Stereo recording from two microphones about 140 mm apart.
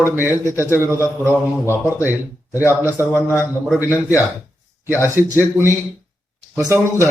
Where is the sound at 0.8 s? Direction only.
20° right (ahead or behind).